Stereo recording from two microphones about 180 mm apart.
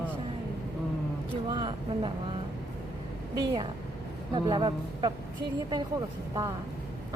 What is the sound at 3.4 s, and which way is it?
Speech, 25° right (ahead or behind).